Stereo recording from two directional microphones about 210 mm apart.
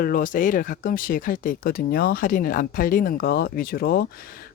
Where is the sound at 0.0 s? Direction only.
40° left (ahead or behind).